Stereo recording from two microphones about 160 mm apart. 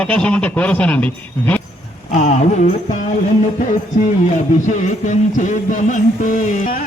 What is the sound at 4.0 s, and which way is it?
Music, 50° left (ahead or behind).